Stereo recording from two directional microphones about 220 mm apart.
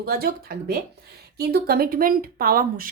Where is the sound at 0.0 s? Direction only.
45° right (ahead or behind).